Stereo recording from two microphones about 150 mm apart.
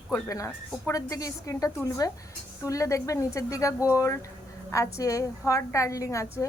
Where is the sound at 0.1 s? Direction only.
20° left (ahead or behind).